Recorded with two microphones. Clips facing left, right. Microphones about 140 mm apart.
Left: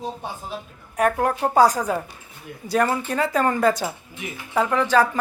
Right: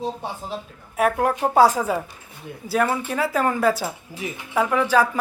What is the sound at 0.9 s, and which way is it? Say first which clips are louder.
Speech: even; centre (ahead or behind).